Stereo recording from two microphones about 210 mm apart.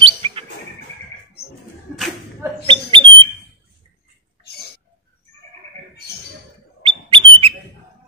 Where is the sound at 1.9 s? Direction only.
Centre (ahead or behind).